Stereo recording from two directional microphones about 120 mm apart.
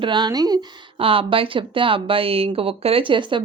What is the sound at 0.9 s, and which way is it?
Speech, 50° right (ahead or behind).